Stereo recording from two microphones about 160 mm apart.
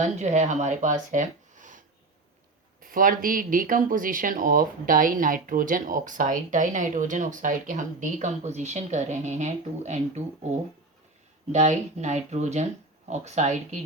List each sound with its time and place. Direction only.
0.0 s speech: 45° right (ahead or behind)
1.1 s a sound: 50° right (ahead or behind)
2.8 s speech: 60° right (ahead or behind)